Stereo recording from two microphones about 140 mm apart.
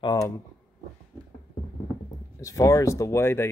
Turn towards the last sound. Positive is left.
turn(degrees=15)  # may be behind; listen again after turning